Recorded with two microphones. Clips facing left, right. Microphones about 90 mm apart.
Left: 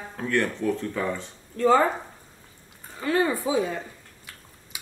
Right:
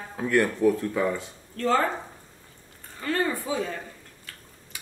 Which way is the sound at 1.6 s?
15° left (ahead or behind).